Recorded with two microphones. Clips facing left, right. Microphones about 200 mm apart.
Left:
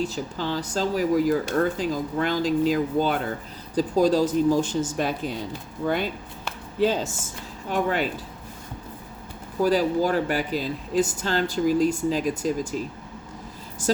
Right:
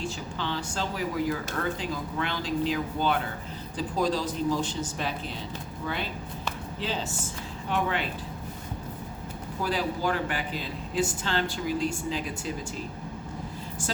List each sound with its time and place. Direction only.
0.0 s speech: 40° left (ahead or behind)
9.6 s speech: 40° left (ahead or behind)